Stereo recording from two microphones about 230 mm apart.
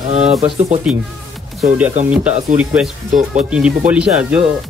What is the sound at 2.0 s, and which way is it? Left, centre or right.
Speech, centre.